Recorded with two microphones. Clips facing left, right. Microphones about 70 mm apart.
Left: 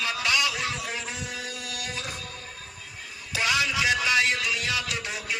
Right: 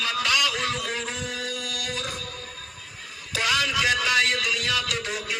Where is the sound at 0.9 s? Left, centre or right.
Centre.